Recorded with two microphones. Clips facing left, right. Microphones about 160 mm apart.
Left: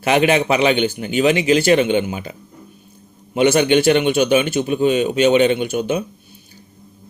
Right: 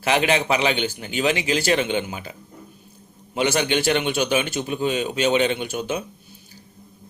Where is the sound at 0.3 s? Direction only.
20° left (ahead or behind).